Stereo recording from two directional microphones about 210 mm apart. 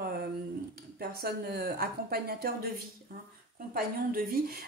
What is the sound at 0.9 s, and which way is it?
A woman's voice, 45° right (ahead or behind).